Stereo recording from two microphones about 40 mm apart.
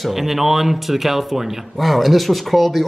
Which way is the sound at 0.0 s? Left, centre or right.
Centre.